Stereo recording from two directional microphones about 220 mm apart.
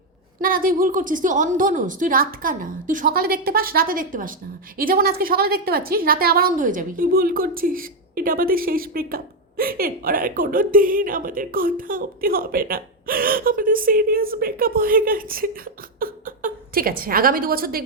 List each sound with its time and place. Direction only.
0.3 s a woman's voice: 40° right (ahead or behind)